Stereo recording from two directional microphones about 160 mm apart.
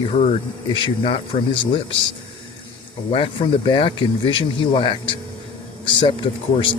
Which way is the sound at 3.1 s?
35° left (ahead or behind).